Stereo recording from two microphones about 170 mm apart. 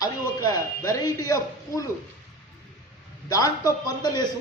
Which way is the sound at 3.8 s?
20° left (ahead or behind).